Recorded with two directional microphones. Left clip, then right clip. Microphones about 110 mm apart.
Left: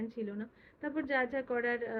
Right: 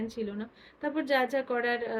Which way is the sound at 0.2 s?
30° right (ahead or behind).